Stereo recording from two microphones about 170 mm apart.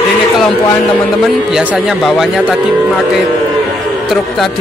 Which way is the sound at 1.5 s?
Centre (ahead or behind).